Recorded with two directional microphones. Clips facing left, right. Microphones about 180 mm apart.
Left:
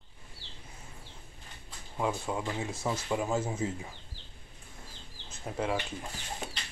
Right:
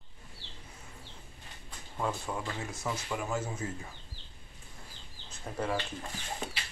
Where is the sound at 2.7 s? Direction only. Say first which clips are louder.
Left 4 dB; 25° left (ahead or behind).